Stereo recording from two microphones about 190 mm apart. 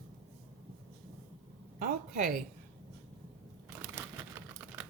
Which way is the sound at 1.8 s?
45° right (ahead or behind).